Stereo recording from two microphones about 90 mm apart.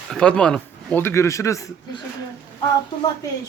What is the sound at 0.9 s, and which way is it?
Speech, 30° left (ahead or behind).